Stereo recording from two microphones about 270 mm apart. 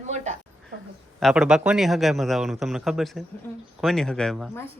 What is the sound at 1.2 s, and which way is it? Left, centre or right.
Speech, centre.